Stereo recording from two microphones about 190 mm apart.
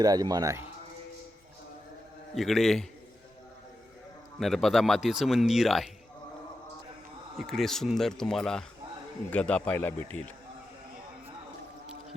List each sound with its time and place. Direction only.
0.0 s a man's voice: 20° right (ahead or behind)
2.3 s speech: centre (ahead or behind)
4.4 s speech: centre (ahead or behind)
7.3 s a man's voice: centre (ahead or behind)